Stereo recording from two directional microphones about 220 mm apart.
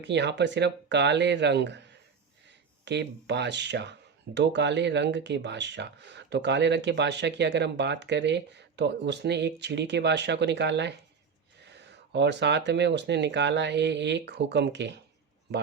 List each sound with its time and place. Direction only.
0.0 s speech: 50° right (ahead or behind)